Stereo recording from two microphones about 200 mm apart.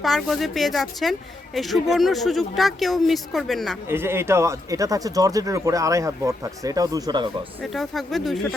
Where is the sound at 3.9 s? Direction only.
10° right (ahead or behind).